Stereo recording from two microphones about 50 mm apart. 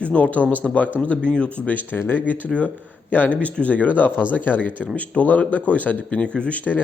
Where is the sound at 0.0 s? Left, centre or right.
Left.